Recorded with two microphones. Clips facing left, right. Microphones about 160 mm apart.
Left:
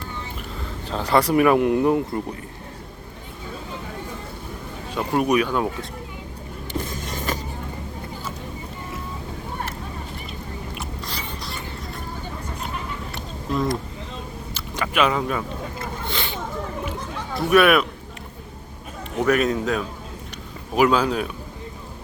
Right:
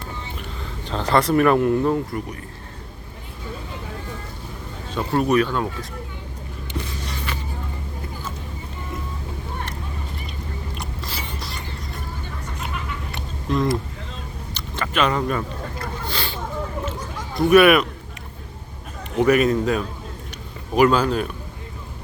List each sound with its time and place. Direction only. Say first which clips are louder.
0.9 s speech: even; 10° left (ahead or behind)
4.9 s speech: right 1 dB; 10° left (ahead or behind)
6.7 s vehicle: left 2 dB; 45° left (ahead or behind)
10.8 s a sound: even; 5° right (ahead or behind)
12.6 s a sound: right 2 dB; centre (ahead or behind)
14.5 s speech: left 1 dB; 5° left (ahead or behind)
16.0 s a sound: left 1 dB; 20° left (ahead or behind)
17.3 s a man's voice: right 3 dB; centre (ahead or behind)
19.1 s a man's voice: right 3 dB; 5° right (ahead or behind)